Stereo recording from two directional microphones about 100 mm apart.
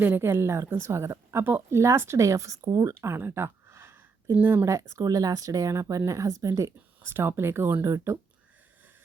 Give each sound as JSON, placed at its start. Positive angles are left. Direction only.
{"t": 0.0, "sound": "a woman's voice", "side_deg": -20}